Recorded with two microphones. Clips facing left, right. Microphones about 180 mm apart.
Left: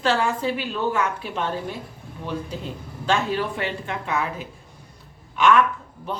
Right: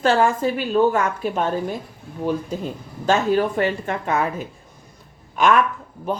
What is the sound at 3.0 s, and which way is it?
A woman's voice, 45° right (ahead or behind).